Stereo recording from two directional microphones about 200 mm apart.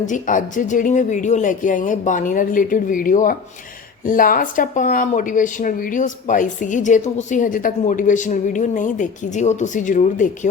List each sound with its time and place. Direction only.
0.0 s speech: 40° left (ahead or behind)